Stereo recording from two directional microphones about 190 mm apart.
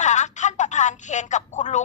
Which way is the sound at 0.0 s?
40° left (ahead or behind).